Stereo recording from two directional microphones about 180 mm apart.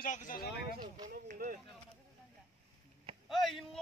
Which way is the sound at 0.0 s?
45° left (ahead or behind).